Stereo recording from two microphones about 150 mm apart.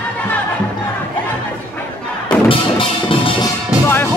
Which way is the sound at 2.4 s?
35° left (ahead or behind).